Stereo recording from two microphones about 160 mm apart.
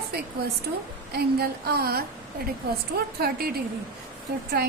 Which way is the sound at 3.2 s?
70° right (ahead or behind).